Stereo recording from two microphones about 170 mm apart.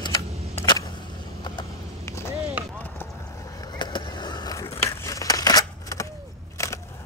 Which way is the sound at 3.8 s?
25° left (ahead or behind).